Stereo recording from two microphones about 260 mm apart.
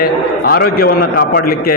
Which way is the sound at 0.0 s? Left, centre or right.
Left.